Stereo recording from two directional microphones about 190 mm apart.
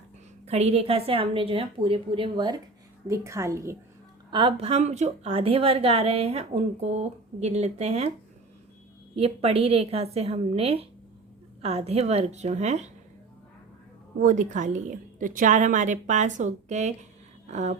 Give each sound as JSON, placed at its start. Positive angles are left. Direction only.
{"t": 0.4, "sound": "a woman's voice", "side_deg": -35}
{"t": 4.3, "sound": "a woman's voice", "side_deg": -25}
{"t": 9.1, "sound": "a woman's voice", "side_deg": -30}
{"t": 14.2, "sound": "a woman's voice", "side_deg": -40}